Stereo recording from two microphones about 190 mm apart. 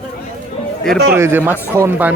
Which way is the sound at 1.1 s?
10° right (ahead or behind).